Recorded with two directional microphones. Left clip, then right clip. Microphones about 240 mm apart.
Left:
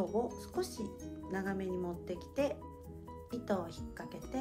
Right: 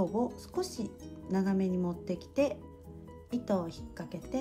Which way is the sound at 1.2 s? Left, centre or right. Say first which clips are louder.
Right 6 dB; right.